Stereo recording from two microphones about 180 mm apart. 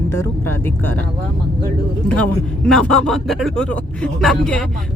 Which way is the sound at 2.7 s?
5° left (ahead or behind).